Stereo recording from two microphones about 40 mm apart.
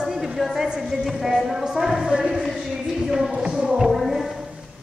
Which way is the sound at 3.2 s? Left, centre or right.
Centre.